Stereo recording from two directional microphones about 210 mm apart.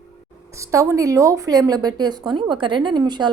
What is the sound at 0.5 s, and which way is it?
A woman's voice, 15° right (ahead or behind).